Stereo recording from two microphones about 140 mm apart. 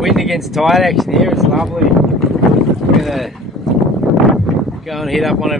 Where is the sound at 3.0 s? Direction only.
Centre (ahead or behind).